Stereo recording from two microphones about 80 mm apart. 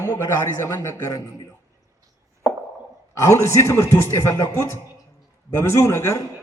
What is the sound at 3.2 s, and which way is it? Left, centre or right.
Speech, left.